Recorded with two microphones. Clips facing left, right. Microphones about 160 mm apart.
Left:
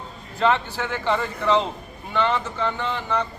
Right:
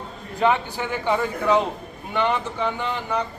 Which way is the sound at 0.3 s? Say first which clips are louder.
Even; 15° right (ahead or behind).